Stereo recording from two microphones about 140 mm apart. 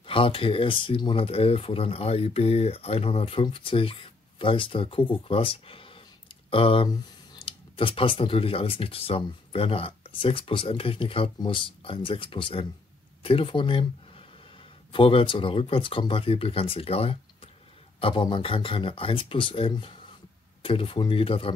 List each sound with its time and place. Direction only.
0.0 s speech: 40° left (ahead or behind)